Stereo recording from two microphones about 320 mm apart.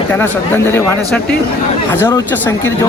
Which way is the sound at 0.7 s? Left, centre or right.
Centre.